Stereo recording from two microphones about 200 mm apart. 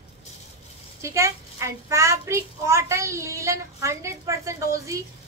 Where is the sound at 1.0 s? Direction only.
15° right (ahead or behind).